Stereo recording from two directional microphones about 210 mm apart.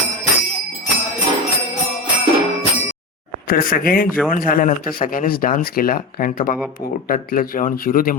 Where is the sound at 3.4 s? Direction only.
40° left (ahead or behind).